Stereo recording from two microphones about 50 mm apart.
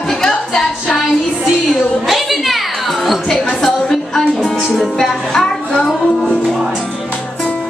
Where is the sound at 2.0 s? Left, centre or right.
Centre.